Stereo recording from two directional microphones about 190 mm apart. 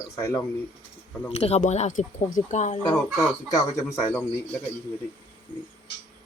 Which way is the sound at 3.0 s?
Centre (ahead or behind).